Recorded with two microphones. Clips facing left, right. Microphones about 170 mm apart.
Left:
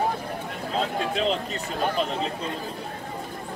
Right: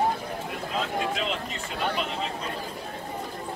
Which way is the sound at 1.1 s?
35° left (ahead or behind).